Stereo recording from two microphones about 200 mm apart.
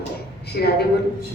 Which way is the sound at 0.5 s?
55° left (ahead or behind).